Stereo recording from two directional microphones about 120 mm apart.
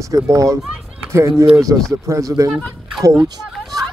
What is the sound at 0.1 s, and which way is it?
Speech, 25° right (ahead or behind).